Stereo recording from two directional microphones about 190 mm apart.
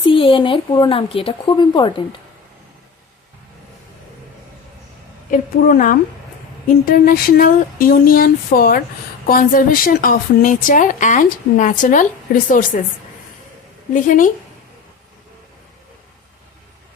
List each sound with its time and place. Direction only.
0.1 s speech: 25° left (ahead or behind)
5.3 s a woman's voice: 45° left (ahead or behind)
13.9 s a woman's voice: 45° left (ahead or behind)